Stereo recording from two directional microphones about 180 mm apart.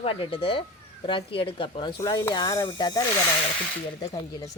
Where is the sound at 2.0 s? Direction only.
15° left (ahead or behind).